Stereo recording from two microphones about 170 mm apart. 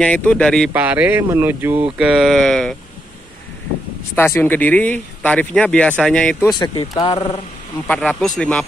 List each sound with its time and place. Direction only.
0.0 s speech: 10° left (ahead or behind)
0.7 s speech: 10° right (ahead or behind)
4.1 s speech: 15° left (ahead or behind)
6.5 s speech: 25° left (ahead or behind)
7.8 s speech: 5° left (ahead or behind)